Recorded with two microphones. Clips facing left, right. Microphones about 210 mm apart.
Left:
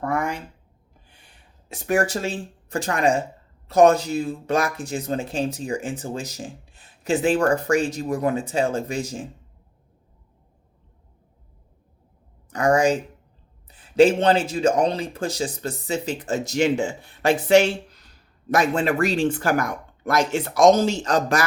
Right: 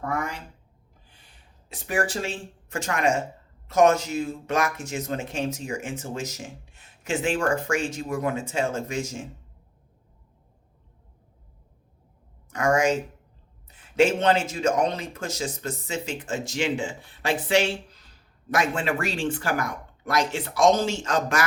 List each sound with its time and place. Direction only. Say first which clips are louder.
0.0 s a sound: left 5 dB; 55° left (ahead or behind)
1.7 s speech: left 5 dB; 45° left (ahead or behind)
12.5 s speech: left 3 dB; 35° left (ahead or behind)